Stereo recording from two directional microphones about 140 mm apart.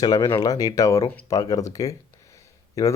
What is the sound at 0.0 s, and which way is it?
Speech, 30° left (ahead or behind).